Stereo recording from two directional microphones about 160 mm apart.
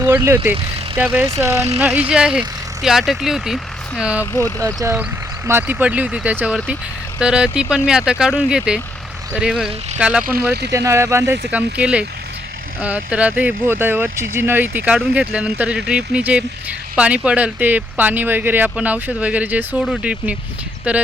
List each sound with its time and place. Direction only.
0.0 s speech: 15° right (ahead or behind)
4.6 s speech: 20° right (ahead or behind)
10.7 s speech: 20° right (ahead or behind)